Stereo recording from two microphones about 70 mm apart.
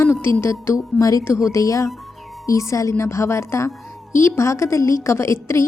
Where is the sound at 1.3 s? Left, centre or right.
Left.